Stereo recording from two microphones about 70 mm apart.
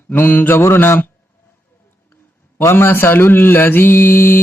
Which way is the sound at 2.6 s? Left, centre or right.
Left.